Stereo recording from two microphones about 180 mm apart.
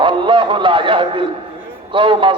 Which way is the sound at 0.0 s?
25° right (ahead or behind).